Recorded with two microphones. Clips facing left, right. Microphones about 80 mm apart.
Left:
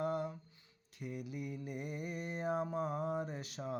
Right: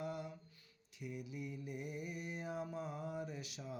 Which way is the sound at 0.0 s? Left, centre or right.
Left.